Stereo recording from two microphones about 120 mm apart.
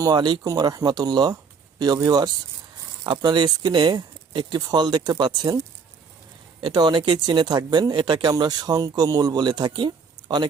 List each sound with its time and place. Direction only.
0.0 s speech: 35° right (ahead or behind)
6.6 s speech: 40° right (ahead or behind)